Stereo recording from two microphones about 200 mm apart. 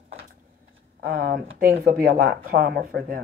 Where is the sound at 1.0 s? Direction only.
50° right (ahead or behind).